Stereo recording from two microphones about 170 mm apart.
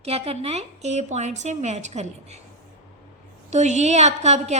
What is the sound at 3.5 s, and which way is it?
A woman's voice, 45° right (ahead or behind).